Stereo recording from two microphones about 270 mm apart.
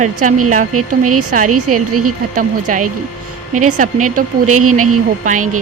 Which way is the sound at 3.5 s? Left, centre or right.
Right.